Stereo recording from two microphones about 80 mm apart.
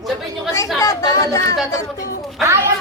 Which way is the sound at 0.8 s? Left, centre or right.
Left.